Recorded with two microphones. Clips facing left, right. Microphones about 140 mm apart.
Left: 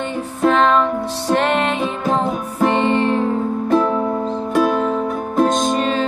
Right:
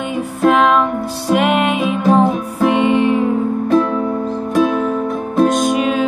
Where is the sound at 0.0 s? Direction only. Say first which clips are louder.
Right 3 dB; 10° right (ahead or behind).